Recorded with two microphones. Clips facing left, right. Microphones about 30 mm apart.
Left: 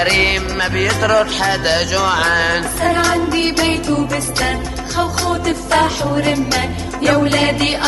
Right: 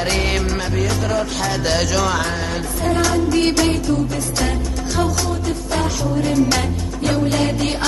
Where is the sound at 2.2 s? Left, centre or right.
Left.